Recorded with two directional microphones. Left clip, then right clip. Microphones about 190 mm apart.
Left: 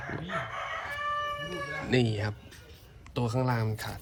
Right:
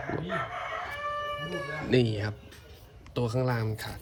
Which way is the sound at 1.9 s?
10° right (ahead or behind).